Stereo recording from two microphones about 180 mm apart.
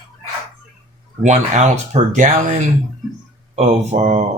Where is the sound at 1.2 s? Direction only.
40° right (ahead or behind).